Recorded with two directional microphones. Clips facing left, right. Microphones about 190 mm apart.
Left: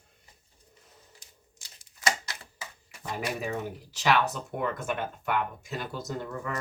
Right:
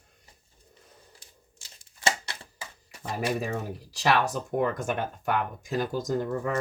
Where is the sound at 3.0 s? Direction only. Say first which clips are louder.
Right 3 dB; 35° right (ahead or behind).